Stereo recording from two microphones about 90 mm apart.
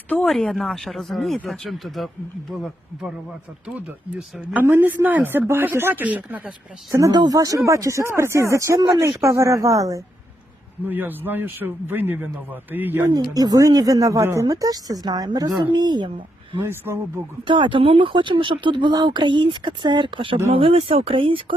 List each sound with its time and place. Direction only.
0.3 s speech: centre (ahead or behind)
4.5 s a man's voice: 25° right (ahead or behind)
7.1 s speech: 45° right (ahead or behind)
10.8 s a man's voice: 20° right (ahead or behind)
13.1 s speech: 45° right (ahead or behind)
16.6 s a man's voice: 25° right (ahead or behind)
17.4 s speech: 70° right (ahead or behind)
20.5 s speech: 90° right; by 21.5 s 75° right (ahead or behind)